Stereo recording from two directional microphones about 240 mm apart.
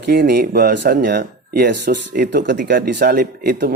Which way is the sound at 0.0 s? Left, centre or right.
Right.